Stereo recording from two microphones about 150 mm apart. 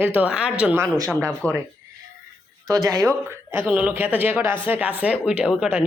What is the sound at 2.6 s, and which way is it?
Speech, 20° right (ahead or behind).